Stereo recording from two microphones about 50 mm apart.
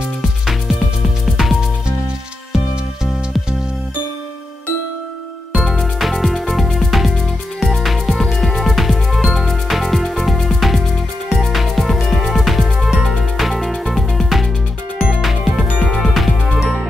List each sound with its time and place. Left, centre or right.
1.2 s music: centre
5.6 s music: centre
12.9 s music: centre
15.0 s music: centre
15.2 s music: centre
15.6 s music: centre
16.0 s music: centre